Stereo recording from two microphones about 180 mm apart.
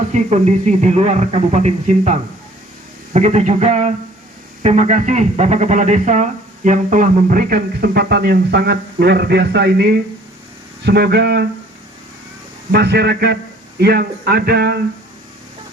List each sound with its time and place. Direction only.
0.1 s speech: 40° right (ahead or behind); by 11.4 s 65° right (ahead or behind)
12.7 s speech: 65° right (ahead or behind)